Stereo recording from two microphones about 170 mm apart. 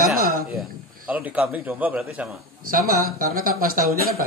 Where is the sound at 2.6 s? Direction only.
55° right (ahead or behind).